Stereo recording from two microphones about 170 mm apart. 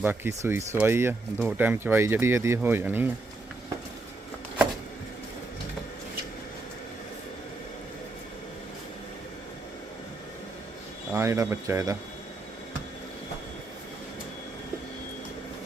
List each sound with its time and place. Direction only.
0.0 s speech: 10° right (ahead or behind)
11.1 s speech: 15° right (ahead or behind)